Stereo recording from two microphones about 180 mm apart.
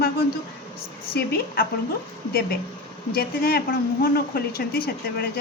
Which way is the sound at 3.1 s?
55° left (ahead or behind).